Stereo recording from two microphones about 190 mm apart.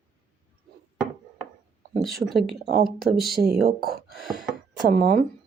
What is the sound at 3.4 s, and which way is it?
Speech, 55° right (ahead or behind).